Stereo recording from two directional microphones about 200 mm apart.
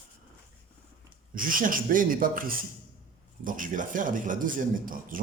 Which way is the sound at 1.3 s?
45° right (ahead or behind).